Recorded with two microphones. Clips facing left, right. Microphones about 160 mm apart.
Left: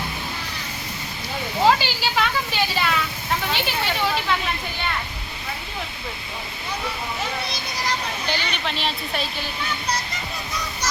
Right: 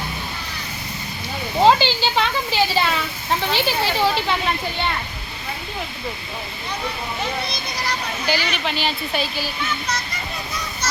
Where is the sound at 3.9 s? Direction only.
30° right (ahead or behind).